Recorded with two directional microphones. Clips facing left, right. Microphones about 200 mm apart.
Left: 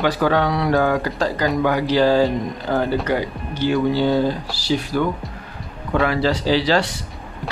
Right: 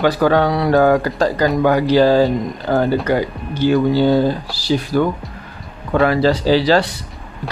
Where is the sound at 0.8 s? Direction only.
50° right (ahead or behind).